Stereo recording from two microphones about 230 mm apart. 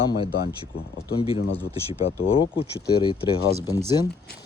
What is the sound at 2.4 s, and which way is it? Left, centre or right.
Speech, left.